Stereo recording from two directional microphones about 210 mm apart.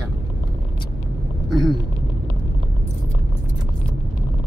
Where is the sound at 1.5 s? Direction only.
Centre (ahead or behind).